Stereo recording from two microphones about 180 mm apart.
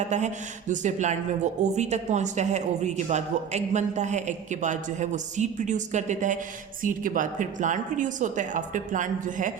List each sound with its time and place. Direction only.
0.1 s a woman's voice: 40° right (ahead or behind)